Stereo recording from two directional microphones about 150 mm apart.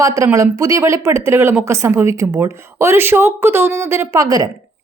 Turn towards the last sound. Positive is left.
turn(degrees=-25)  # may be behind; listen again after turning